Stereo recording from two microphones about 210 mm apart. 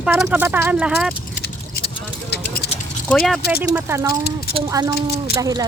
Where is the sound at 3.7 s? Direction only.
10° right (ahead or behind).